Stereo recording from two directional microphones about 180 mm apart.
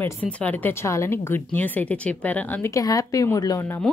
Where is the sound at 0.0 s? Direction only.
10° left (ahead or behind).